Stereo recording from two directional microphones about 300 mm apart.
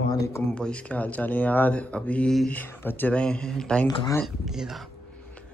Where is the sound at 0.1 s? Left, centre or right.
Centre.